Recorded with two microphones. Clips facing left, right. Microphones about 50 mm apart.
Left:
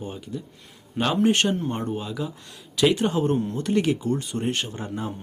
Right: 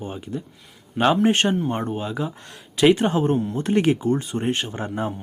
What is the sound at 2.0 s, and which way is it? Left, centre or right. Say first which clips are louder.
Speech: right 3 dB; right.